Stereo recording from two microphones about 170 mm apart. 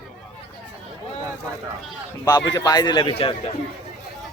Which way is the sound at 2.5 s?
20° left (ahead or behind).